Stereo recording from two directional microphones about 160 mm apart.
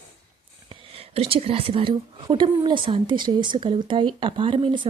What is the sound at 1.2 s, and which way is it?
A woman's voice, 35° right (ahead or behind).